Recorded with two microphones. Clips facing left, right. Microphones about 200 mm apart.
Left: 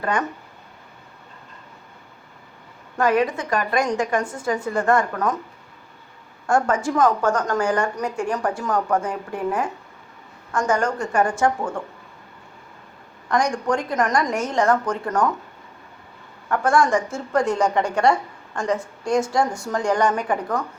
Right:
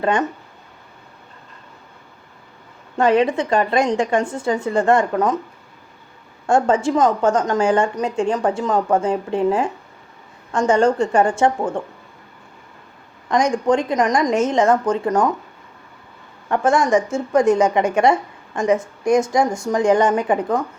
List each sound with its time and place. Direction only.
0.0 s a woman's voice: 25° right (ahead or behind)
3.0 s a woman's voice: 25° right (ahead or behind)
6.5 s a woman's voice: 25° right (ahead or behind)
13.2 s a woman's voice: 20° right (ahead or behind)
16.5 s a woman's voice: 20° right (ahead or behind)